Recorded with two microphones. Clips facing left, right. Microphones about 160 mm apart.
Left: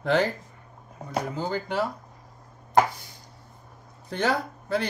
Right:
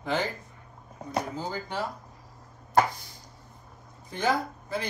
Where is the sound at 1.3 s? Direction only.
65° left (ahead or behind).